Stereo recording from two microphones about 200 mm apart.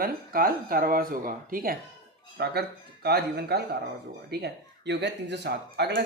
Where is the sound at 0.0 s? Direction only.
45° right (ahead or behind).